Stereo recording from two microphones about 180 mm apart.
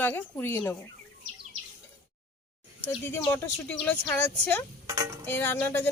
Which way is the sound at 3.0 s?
10° left (ahead or behind).